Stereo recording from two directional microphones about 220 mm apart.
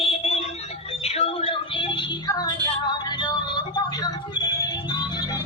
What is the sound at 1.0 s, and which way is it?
Music, 25° left (ahead or behind).